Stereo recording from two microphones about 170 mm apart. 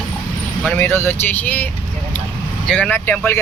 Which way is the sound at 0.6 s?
10° left (ahead or behind).